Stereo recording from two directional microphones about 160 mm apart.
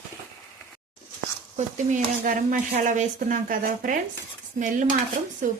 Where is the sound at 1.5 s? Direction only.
55° right (ahead or behind).